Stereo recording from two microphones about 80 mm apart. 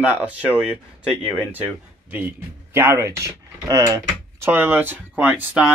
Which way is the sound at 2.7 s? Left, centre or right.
Right.